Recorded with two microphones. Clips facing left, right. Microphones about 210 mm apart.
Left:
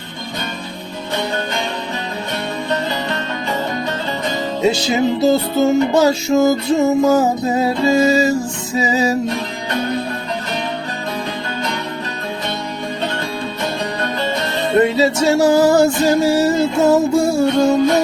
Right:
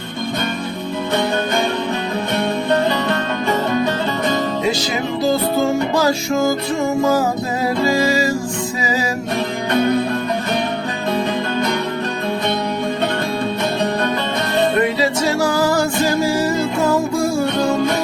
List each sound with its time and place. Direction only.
2.6 s music: 55° right (ahead or behind)
4.6 s music: 25° left (ahead or behind)
14.8 s music: 25° left (ahead or behind)